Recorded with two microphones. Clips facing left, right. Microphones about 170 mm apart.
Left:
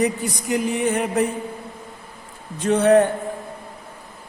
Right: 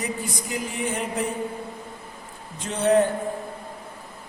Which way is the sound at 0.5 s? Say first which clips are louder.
Left 8 dB; 70° left (ahead or behind).